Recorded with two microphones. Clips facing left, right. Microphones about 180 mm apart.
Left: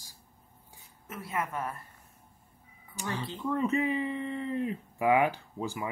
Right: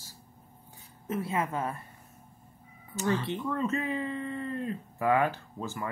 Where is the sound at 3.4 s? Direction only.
15° left (ahead or behind).